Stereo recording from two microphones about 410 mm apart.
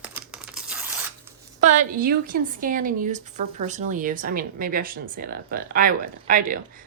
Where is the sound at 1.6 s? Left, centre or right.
Centre.